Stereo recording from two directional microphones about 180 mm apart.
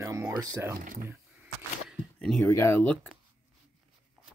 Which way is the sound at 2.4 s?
15° left (ahead or behind).